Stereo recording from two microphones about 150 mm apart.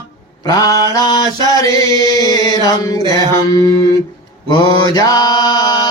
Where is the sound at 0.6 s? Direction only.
25° left (ahead or behind).